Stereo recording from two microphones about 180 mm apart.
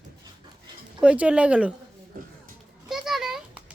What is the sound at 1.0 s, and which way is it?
Speech, 5° right (ahead or behind).